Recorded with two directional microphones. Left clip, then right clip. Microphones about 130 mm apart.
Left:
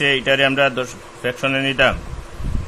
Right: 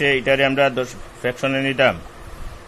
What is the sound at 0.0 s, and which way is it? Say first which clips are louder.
Speech: left 1 dB; 15° right (ahead or behind).